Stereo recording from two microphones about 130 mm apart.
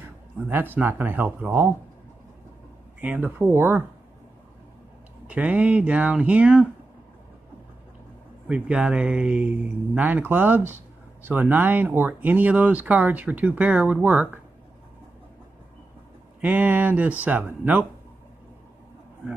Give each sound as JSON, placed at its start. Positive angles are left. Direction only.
{"t": 0.5, "sound": "speech", "side_deg": -15}
{"t": 3.0, "sound": "speech", "side_deg": -10}
{"t": 5.2, "sound": "speech", "side_deg": -10}
{"t": 8.5, "sound": "speech", "side_deg": -10}
{"t": 16.3, "sound": "speech", "side_deg": -15}